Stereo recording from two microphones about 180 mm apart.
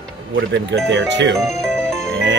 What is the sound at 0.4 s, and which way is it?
Speech, 80° right.